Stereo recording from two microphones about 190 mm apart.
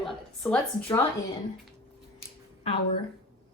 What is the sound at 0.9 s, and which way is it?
Speech, 25° left (ahead or behind).